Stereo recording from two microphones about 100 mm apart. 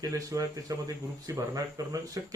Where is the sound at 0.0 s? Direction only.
35° right (ahead or behind).